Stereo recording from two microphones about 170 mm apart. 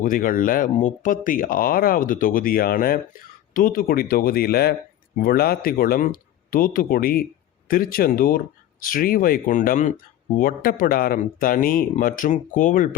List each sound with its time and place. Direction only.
0.0 s speech: 55° left (ahead or behind)